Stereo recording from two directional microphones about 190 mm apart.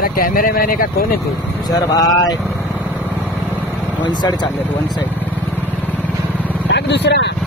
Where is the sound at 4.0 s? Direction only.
25° left (ahead or behind).